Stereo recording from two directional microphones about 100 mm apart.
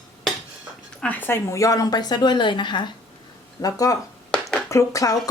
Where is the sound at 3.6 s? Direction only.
35° left (ahead or behind).